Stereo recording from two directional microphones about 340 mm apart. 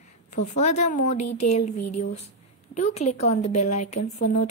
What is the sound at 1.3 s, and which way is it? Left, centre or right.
Speech, left.